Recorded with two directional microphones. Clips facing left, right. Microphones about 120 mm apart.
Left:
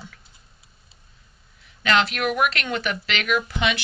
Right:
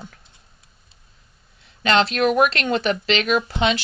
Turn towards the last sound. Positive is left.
turn(degrees=-30)  # may be behind; listen again after turning